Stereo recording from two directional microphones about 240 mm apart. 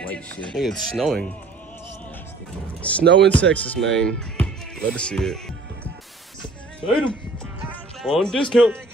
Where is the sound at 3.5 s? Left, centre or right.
Centre.